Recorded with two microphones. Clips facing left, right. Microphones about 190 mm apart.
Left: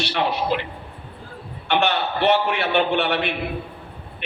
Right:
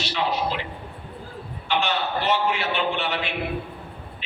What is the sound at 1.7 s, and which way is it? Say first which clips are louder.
A man's voice: left 4 dB; 60° left (ahead or behind).